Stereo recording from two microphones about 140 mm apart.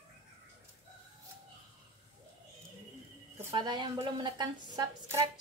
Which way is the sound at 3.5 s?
30° right (ahead or behind).